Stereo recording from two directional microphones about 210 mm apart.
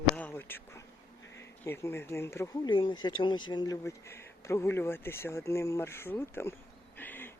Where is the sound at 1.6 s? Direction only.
10° left (ahead or behind).